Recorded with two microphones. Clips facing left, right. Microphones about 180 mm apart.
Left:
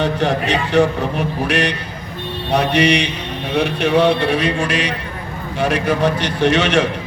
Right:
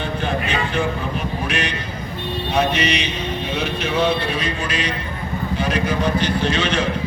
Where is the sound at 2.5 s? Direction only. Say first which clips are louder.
Left 5 dB; 70° left (ahead or behind).